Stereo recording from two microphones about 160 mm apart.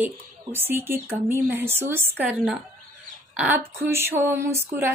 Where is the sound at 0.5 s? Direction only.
15° right (ahead or behind).